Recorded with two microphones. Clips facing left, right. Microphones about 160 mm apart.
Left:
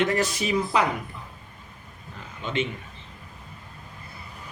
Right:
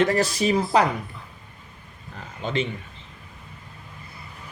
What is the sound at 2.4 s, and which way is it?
Speech, 35° right (ahead or behind).